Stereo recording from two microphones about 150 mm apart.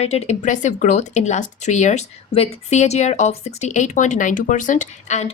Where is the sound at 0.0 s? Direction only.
45° left (ahead or behind).